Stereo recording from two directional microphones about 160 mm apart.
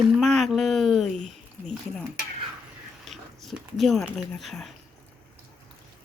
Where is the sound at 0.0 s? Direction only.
Centre (ahead or behind).